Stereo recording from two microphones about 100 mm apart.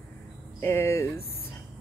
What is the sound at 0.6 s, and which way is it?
Speech, 25° left (ahead or behind).